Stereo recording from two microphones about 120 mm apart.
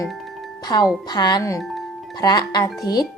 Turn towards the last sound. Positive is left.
turn(degrees=35)  # may be behind; listen again after turning